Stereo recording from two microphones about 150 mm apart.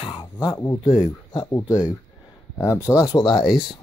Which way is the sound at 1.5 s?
20° left (ahead or behind).